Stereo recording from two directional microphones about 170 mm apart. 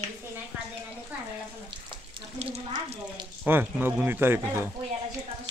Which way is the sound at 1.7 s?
30° right (ahead or behind).